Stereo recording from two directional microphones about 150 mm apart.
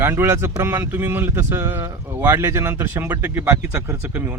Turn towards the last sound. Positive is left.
turn(degrees=-15)  # may be behind; listen again after turning